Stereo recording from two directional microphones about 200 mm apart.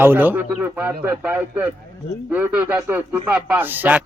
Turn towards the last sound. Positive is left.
turn(degrees=-10)  # may be behind; listen again after turning